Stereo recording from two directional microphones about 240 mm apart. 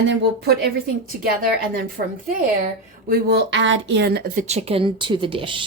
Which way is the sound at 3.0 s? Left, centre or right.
Right.